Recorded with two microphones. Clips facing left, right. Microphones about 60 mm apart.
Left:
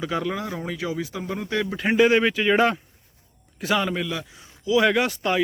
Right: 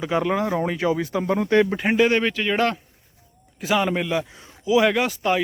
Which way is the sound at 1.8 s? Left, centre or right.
Centre.